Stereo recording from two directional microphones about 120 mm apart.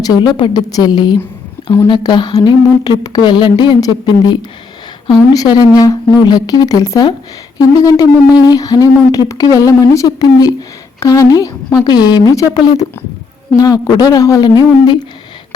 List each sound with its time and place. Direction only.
0.1 s a woman's voice: 40° left (ahead or behind)